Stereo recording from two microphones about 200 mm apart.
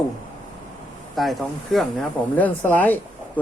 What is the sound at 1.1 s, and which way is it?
Speech, centre (ahead or behind).